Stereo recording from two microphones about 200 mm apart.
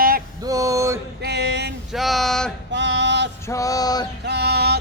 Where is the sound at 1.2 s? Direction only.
55° right (ahead or behind).